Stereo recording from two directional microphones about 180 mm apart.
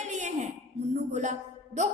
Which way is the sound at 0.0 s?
40° right (ahead or behind).